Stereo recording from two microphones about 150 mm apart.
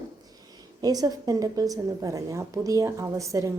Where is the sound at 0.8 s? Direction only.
25° right (ahead or behind).